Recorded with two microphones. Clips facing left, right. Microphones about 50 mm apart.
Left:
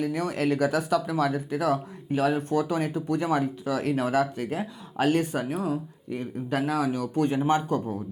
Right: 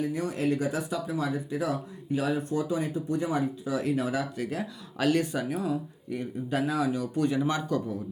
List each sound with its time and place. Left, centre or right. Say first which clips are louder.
0.0 s speech: left 2 dB; left